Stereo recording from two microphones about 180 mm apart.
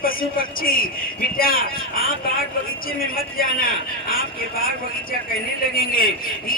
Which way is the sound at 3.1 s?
55° left (ahead or behind).